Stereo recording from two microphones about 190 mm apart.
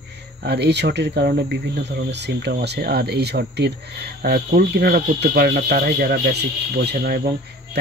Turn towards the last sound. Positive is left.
turn(degrees=-55)  # may be behind; listen again after turning